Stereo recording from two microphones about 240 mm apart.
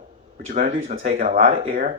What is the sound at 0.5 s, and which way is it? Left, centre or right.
Speech, right.